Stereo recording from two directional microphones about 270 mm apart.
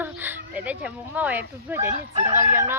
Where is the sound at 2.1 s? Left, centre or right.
Right.